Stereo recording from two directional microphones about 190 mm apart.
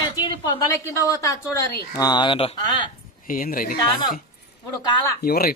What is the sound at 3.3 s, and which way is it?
Speech, 45° left (ahead or behind).